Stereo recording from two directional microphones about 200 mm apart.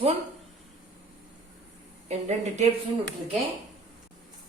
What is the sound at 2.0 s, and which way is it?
Speech, 35° right (ahead or behind).